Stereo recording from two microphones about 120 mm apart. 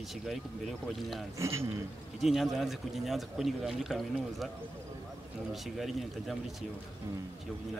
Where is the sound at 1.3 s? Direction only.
25° right (ahead or behind).